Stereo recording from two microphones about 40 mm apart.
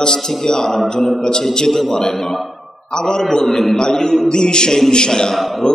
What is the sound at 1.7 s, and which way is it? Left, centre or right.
Speech, centre.